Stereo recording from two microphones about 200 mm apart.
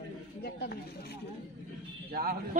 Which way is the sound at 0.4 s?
55° left (ahead or behind).